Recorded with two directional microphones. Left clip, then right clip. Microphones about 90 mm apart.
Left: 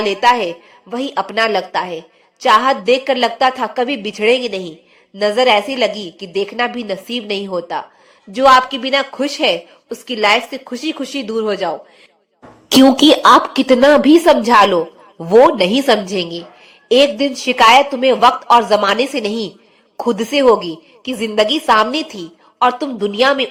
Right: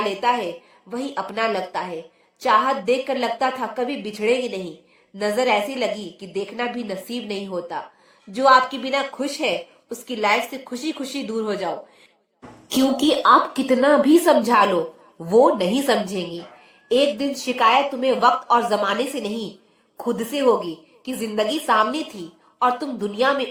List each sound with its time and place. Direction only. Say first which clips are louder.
0.0 s a woman's voice: left 8 dB; 25° left (ahead or behind)
12.7 s a woman's voice: left 10 dB; 55° left (ahead or behind)
13.5 s a woman's voice: left 7 dB; 40° left (ahead or behind)